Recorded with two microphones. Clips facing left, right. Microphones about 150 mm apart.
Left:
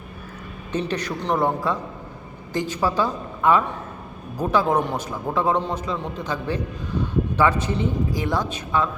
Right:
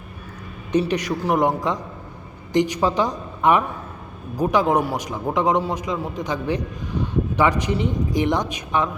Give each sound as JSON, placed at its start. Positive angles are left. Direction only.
{"t": 0.7, "sound": "a man's voice", "side_deg": -15}